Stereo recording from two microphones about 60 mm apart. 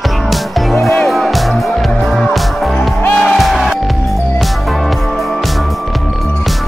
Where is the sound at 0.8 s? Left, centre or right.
Centre.